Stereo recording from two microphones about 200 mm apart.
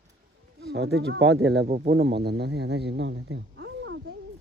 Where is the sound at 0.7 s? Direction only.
60° right (ahead or behind).